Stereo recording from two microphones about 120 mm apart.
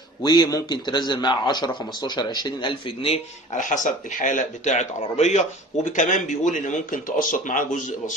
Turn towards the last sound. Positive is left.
turn(degrees=90)